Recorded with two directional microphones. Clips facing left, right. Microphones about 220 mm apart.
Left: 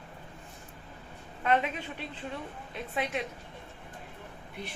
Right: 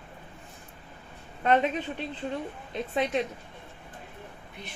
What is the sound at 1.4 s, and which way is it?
A woman's voice, 35° right (ahead or behind).